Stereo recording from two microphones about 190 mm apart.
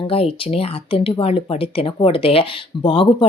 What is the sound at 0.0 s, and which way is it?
Speech, 30° left (ahead or behind).